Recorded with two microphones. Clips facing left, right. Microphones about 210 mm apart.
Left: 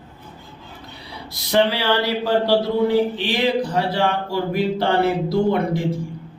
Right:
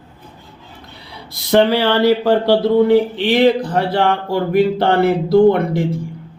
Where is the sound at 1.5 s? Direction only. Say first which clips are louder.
Right 5 dB; 55° right (ahead or behind).